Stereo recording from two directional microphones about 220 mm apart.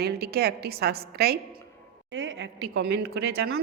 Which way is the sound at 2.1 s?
60° right (ahead or behind).